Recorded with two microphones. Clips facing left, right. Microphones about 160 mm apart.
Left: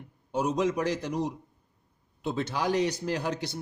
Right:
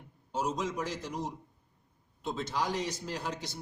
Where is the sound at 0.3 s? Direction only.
60° left (ahead or behind).